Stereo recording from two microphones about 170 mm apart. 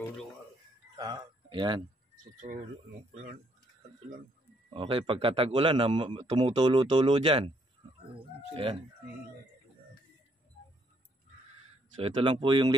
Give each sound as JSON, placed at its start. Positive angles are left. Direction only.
{"t": 0.9, "sound": "a sound", "side_deg": -25}
{"t": 2.4, "sound": "speech", "side_deg": -50}
{"t": 4.7, "sound": "a man's voice", "side_deg": -30}
{"t": 12.0, "sound": "speech", "side_deg": -30}